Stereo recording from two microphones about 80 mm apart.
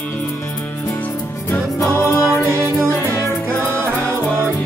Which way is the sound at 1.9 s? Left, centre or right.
Left.